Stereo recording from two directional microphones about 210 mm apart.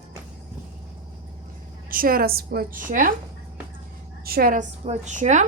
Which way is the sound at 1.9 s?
45° right (ahead or behind).